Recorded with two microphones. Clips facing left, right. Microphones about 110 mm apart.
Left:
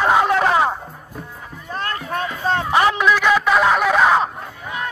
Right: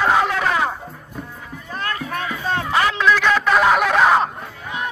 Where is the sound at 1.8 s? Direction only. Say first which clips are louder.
Left 1 dB; 30° left (ahead or behind); by 4.3 s centre (ahead or behind).